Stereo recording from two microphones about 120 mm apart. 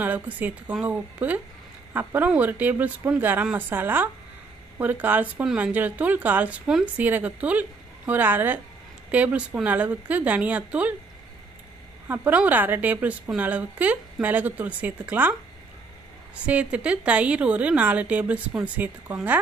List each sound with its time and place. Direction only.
0.0 s speech: 15° right (ahead or behind)
12.1 s speech: 15° right (ahead or behind)
16.4 s speech: 10° right (ahead or behind)